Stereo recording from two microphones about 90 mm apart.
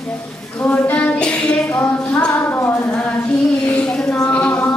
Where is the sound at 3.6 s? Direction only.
10° left (ahead or behind).